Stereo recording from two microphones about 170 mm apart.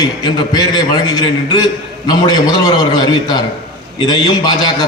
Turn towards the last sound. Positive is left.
turn(degrees=25)  # may be behind; listen again after turning